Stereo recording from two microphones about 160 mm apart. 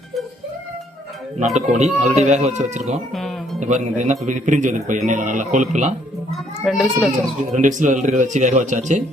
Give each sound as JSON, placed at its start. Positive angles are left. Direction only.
{"t": 1.5, "sound": "speech", "side_deg": -45}
{"t": 3.2, "sound": "music", "side_deg": 0}
{"t": 3.6, "sound": "speech", "side_deg": -50}
{"t": 6.7, "sound": "a child's voice", "side_deg": 0}
{"t": 7.5, "sound": "speech", "side_deg": -50}